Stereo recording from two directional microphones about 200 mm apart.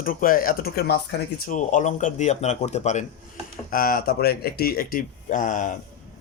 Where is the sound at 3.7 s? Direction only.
45° left (ahead or behind).